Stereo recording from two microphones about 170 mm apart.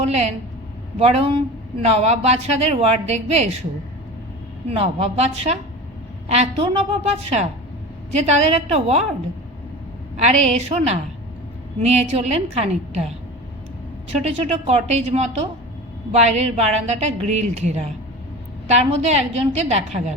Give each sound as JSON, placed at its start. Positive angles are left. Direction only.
{"t": 0.9, "sound": "a woman's voice", "side_deg": -35}
{"t": 4.7, "sound": "a woman's voice", "side_deg": -35}
{"t": 10.2, "sound": "a woman's voice", "side_deg": -40}
{"t": 14.3, "sound": "a woman's voice", "side_deg": -40}